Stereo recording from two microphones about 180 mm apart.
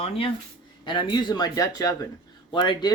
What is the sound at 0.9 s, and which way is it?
Speech, 25° left (ahead or behind).